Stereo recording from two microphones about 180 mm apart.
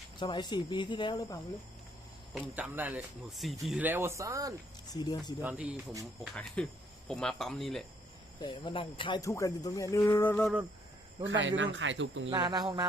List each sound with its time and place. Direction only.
0.2 s speech: 25° left (ahead or behind)
2.6 s speech: 10° right (ahead or behind)
4.9 s speech: 20° left (ahead or behind)
5.4 s speech: 5° right (ahead or behind)
6.3 s speech: 5° left (ahead or behind)
8.4 s speech: 25° left (ahead or behind); by 10.5 s 10° left (ahead or behind)
11.2 s speech: 90° right
12.3 s cricket: 20° right (ahead or behind)